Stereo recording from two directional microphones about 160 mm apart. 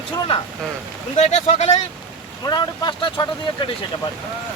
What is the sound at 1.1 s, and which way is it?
Speech, 45° left (ahead or behind).